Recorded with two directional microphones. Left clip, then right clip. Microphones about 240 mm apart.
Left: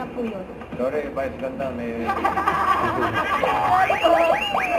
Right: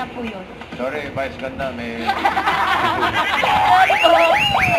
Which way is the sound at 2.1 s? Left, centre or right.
Centre.